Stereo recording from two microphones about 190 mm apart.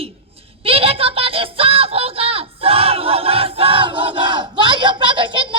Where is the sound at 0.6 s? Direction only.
30° right (ahead or behind).